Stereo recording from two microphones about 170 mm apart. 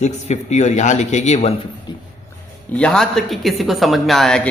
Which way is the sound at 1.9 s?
25° left (ahead or behind).